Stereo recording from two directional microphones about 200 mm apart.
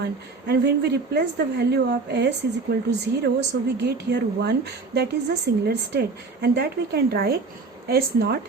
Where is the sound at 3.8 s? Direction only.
55° right (ahead or behind).